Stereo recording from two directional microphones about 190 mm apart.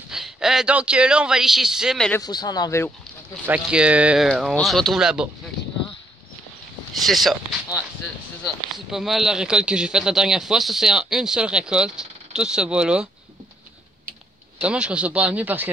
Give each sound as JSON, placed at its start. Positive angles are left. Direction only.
{"t": 0.1, "sound": "speech", "side_deg": -5}
{"t": 2.1, "sound": "speech", "side_deg": 20}
{"t": 3.4, "sound": "speech", "side_deg": -5}
{"t": 6.9, "sound": "speech", "side_deg": 0}
{"t": 8.7, "sound": "speech", "side_deg": 0}
{"t": 14.6, "sound": "speech", "side_deg": -5}